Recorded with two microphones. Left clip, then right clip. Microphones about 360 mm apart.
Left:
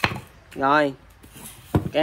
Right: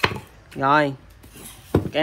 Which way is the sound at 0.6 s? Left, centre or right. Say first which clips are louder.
Right 1 dB; centre.